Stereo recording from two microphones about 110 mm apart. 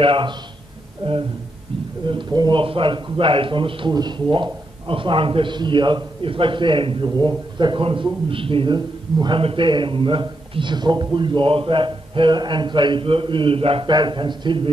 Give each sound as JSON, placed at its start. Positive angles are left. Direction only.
{"t": 0.0, "sound": "speech", "side_deg": -55}
{"t": 2.6, "sound": "speech", "side_deg": -50}
{"t": 13.9, "sound": "speech", "side_deg": -45}